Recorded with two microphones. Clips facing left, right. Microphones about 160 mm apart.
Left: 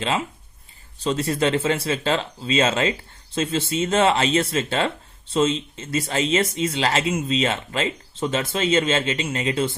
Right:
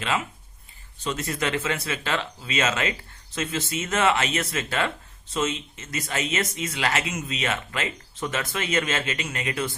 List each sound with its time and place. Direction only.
0.0 s speech: 30° left (ahead or behind)